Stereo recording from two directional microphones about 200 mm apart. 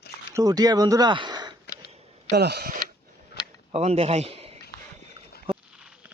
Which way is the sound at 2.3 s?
55° right (ahead or behind).